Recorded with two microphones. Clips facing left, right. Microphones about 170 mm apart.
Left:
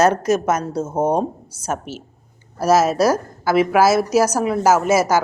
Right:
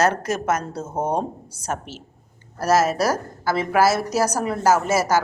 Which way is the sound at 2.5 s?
10° left (ahead or behind).